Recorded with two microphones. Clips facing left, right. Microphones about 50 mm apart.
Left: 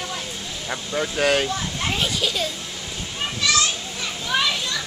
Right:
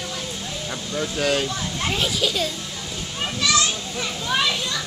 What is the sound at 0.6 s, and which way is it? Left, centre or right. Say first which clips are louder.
Speech: left 3 dB; left.